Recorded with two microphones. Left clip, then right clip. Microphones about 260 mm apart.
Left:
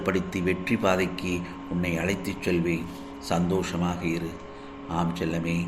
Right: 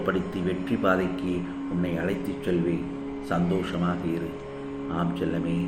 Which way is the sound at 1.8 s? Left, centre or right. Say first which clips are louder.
Left 2 dB; left.